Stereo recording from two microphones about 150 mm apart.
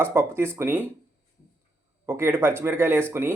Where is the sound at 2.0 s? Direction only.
15° right (ahead or behind).